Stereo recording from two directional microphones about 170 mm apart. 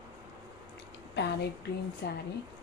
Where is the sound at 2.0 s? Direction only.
80° left.